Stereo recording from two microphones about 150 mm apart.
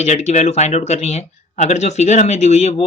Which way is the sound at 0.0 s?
45° left (ahead or behind).